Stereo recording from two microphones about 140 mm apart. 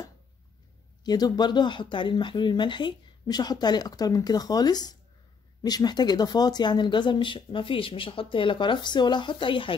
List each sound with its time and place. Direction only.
1.0 s speech: 30° left (ahead or behind)